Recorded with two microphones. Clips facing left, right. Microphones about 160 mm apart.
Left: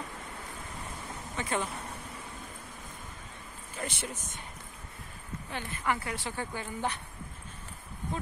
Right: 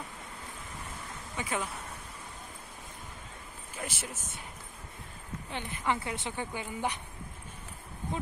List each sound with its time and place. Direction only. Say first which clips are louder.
1.3 s speech: left 2 dB; 5° right (ahead or behind)
3.7 s a sound: left 2 dB; 5° right (ahead or behind)
5.5 s speech: even; 20° right (ahead or behind)